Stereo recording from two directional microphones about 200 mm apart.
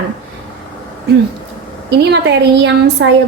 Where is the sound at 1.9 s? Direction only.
60° right (ahead or behind).